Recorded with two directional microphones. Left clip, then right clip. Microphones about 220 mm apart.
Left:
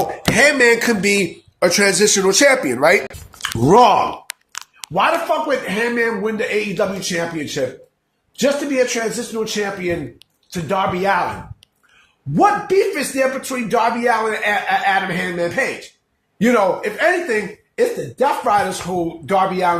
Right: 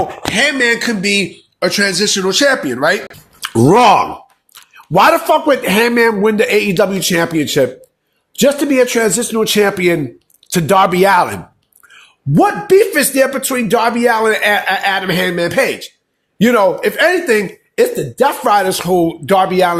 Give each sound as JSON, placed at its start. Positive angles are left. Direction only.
{"t": 0.3, "sound": "speech", "side_deg": -25}
{"t": 4.9, "sound": "speech", "side_deg": -55}
{"t": 12.3, "sound": "speech", "side_deg": -50}